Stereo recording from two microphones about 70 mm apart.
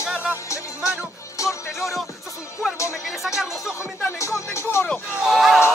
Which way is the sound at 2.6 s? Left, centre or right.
Centre.